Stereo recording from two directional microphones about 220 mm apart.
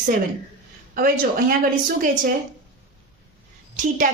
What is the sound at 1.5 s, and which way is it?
Speech, 40° right (ahead or behind).